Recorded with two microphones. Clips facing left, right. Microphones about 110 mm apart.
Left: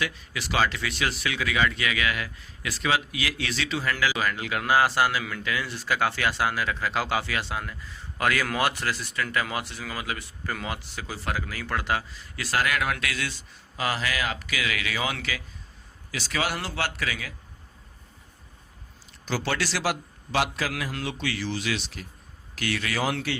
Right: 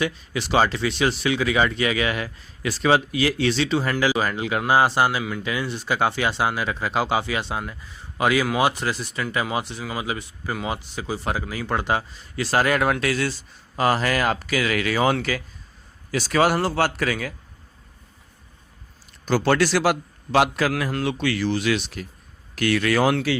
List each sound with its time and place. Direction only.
0.0 s speech: 30° right (ahead or behind); by 17.3 s 45° right (ahead or behind)
19.2 s a man's voice: 50° right (ahead or behind)